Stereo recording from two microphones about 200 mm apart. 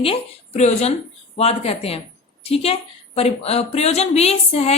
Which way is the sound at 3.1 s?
30° left (ahead or behind).